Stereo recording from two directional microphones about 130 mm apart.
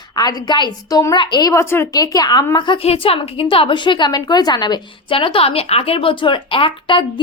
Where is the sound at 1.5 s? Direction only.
20° left (ahead or behind).